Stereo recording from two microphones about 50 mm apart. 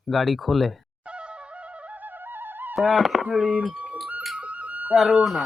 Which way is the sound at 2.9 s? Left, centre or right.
Centre.